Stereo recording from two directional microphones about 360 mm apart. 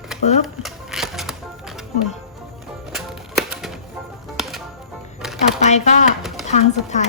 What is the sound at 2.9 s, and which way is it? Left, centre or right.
Music, centre.